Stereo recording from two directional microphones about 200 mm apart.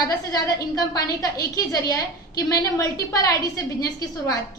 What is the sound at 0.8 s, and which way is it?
A woman's voice, 20° left (ahead or behind).